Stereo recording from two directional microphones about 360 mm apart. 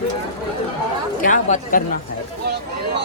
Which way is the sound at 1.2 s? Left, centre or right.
Left.